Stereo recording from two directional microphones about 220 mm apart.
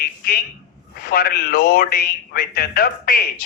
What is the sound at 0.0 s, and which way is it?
A man's voice, 40° left (ahead or behind).